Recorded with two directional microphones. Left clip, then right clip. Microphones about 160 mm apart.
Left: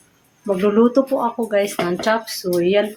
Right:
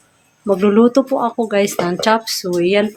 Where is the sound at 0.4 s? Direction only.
60° right (ahead or behind).